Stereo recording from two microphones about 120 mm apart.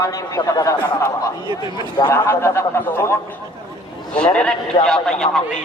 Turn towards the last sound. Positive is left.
turn(degrees=5)  # may be behind; listen again after turning